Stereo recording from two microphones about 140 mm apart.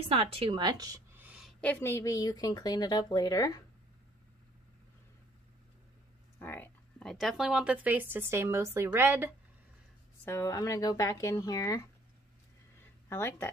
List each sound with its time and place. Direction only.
0.0 s speech: 45° right (ahead or behind); by 1.0 s 25° right (ahead or behind)
1.1 s a sound: 10° right (ahead or behind)
1.6 s speech: 15° left (ahead or behind)
6.4 s speech: 15° left (ahead or behind)
7.0 s a woman's voice: centre (ahead or behind); by 9.3 s 15° right (ahead or behind)
10.2 s speech: 20° left (ahead or behind)
13.1 s speech: 20° left (ahead or behind)